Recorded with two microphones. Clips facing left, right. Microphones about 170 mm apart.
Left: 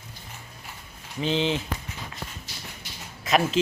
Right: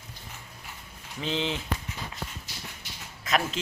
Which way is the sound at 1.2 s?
Centre (ahead or behind).